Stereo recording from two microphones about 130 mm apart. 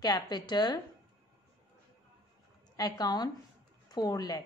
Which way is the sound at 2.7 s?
30° left (ahead or behind).